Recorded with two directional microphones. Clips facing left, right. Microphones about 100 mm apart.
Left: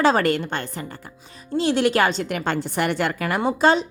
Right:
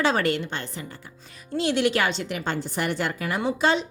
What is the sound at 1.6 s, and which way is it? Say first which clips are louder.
A woman's voice: left 4 dB; 35° left (ahead or behind).